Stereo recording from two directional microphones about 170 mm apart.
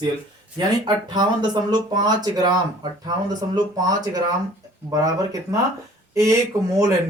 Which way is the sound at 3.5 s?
25° right (ahead or behind).